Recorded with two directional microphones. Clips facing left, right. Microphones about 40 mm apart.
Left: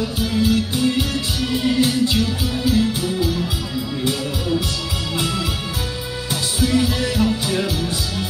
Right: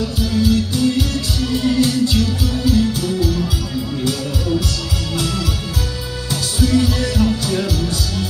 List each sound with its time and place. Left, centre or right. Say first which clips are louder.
0.3 s music: right 2 dB; left
5.1 s music: right 1 dB; left
6.7 s music: right 2 dB; left